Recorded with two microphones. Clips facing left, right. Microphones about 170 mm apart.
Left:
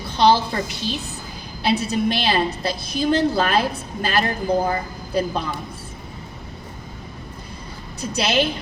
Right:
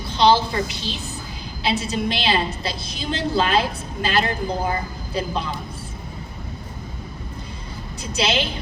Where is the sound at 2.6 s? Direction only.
45° left (ahead or behind).